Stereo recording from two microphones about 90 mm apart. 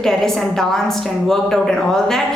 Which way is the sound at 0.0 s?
5° left (ahead or behind).